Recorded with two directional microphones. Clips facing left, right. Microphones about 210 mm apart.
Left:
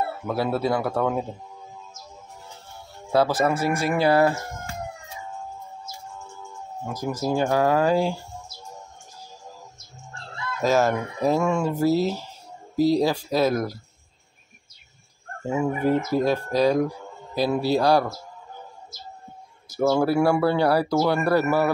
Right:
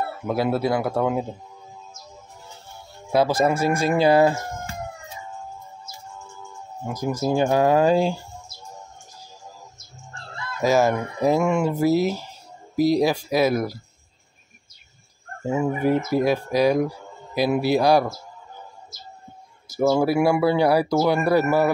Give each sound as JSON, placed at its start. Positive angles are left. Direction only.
{"t": 0.3, "sound": "speech", "side_deg": -10}
{"t": 3.1, "sound": "speech", "side_deg": -15}
{"t": 6.9, "sound": "speech", "side_deg": -15}
{"t": 10.6, "sound": "speech", "side_deg": -10}
{"t": 15.4, "sound": "speech", "side_deg": -5}
{"t": 19.7, "sound": "speech", "side_deg": -10}